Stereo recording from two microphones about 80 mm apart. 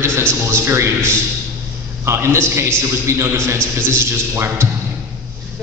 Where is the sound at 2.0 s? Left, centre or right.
Right.